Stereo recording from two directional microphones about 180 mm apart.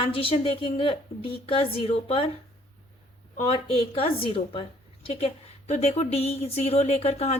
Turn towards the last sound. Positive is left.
turn(degrees=35)  # may be behind; listen again after turning